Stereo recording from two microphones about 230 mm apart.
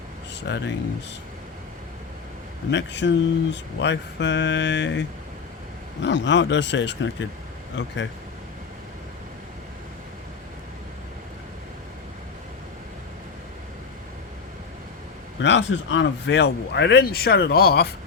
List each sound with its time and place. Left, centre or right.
0.4 s speech: left
2.6 s speech: left
15.4 s speech: left